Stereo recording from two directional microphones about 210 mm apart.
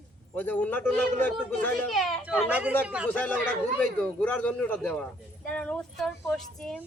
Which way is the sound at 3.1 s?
5° left (ahead or behind).